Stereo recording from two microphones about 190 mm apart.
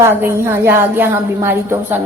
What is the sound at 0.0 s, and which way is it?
A woman's voice, 10° right (ahead or behind).